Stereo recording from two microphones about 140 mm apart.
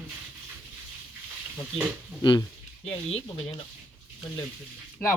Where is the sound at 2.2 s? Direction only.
30° left (ahead or behind).